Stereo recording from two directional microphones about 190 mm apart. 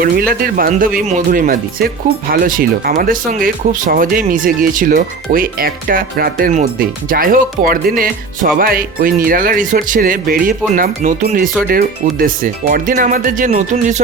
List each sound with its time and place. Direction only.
0.0 s speech: 50° right (ahead or behind)